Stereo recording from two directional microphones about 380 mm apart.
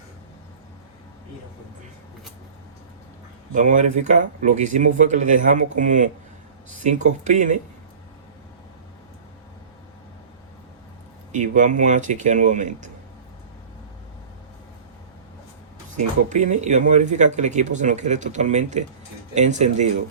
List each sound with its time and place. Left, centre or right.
3.5 s speech: centre
11.3 s speech: centre
16.3 s speech: centre